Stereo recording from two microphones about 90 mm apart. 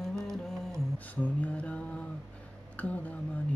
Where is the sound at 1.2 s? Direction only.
15° left (ahead or behind).